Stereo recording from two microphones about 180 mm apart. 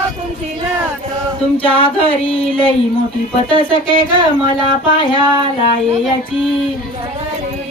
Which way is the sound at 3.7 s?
30° left (ahead or behind).